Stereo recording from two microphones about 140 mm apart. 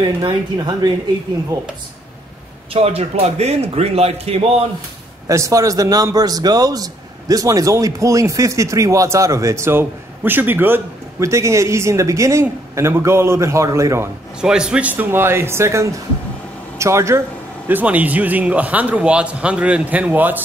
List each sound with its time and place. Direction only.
0.0 s speech: 30° right (ahead or behind)
2.7 s a man's voice: 45° right (ahead or behind)
5.3 s a man's voice: 25° right (ahead or behind)
14.4 s speech: 5° right (ahead or behind)